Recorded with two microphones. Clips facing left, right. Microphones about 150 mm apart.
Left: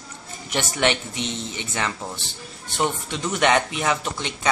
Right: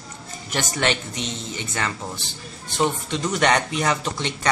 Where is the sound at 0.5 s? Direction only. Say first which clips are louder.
Left 1 dB; 20° left (ahead or behind).